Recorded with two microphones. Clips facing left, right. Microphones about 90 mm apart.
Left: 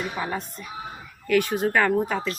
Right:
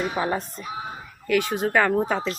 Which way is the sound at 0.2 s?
35° right (ahead or behind).